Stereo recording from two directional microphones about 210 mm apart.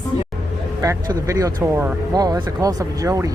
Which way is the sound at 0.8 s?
15° right (ahead or behind).